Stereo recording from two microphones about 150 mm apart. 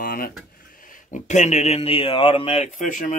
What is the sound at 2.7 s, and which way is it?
Speech, 60° left (ahead or behind).